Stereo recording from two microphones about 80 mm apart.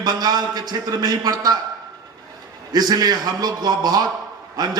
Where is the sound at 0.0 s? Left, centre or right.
Right.